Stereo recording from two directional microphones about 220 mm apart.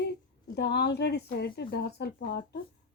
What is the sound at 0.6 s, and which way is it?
Speech, 50° left (ahead or behind).